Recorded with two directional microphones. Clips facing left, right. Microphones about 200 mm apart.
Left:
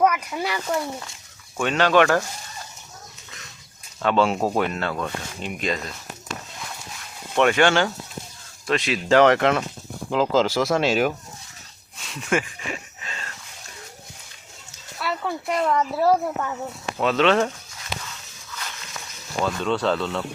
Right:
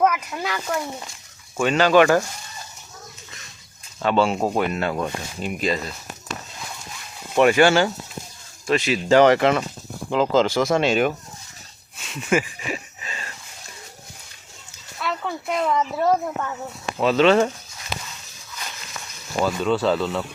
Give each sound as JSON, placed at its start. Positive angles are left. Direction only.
{"t": 0.0, "sound": "a sound", "side_deg": 0}
{"t": 0.3, "sound": "speech", "side_deg": 10}
{"t": 4.0, "sound": "speech", "side_deg": 0}
{"t": 4.8, "sound": "speech", "side_deg": -15}
{"t": 5.4, "sound": "speech", "side_deg": 0}
{"t": 7.3, "sound": "speech", "side_deg": -5}
{"t": 11.9, "sound": "a sound", "side_deg": 0}
{"t": 14.9, "sound": "speech", "side_deg": 5}
{"t": 19.4, "sound": "speech", "side_deg": -5}